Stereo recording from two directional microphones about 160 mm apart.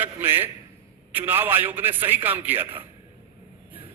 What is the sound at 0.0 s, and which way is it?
A man's voice, 10° right (ahead or behind).